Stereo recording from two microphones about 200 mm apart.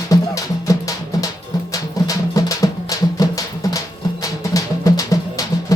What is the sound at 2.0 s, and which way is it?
Music, 15° left (ahead or behind).